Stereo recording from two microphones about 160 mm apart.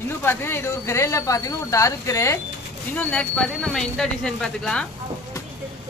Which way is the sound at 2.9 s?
5° left (ahead or behind).